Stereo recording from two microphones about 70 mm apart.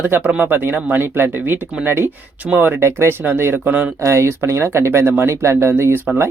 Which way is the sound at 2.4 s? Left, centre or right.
Right.